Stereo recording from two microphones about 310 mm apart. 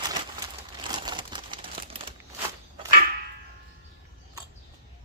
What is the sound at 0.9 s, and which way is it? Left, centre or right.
Crumpling, centre.